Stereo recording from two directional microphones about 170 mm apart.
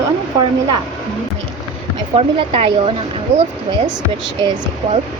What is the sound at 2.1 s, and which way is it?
Speech, 35° right (ahead or behind).